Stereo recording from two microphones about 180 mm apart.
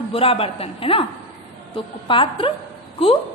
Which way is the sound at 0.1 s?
30° left (ahead or behind).